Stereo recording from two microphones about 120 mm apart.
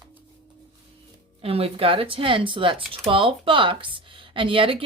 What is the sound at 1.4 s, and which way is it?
Speech, 50° right (ahead or behind).